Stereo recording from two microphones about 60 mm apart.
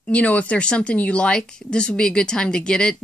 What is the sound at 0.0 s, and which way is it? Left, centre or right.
Speech, left.